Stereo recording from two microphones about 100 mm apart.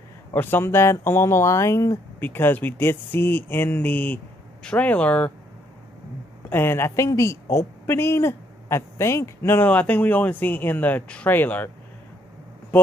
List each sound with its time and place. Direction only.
0.3 s speech: 20° left (ahead or behind)
2.1 s speech: 20° left (ahead or behind)
6.5 s speech: 25° left (ahead or behind)
9.7 s speech: 15° left (ahead or behind)